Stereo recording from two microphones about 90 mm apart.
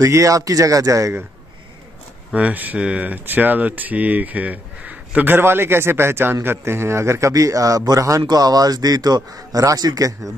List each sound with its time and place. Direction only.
0.0 s speech: 35° right (ahead or behind)
2.3 s a man's voice: 15° right (ahead or behind); by 10.3 s 40° right (ahead or behind)